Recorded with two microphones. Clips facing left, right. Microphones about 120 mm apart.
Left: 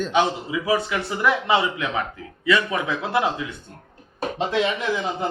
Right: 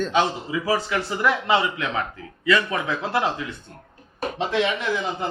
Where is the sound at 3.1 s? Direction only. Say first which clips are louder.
Left 2 dB; 20° left (ahead or behind).